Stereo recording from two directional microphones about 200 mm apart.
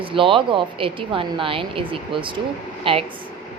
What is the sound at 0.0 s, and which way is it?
A woman's voice, 25° right (ahead or behind).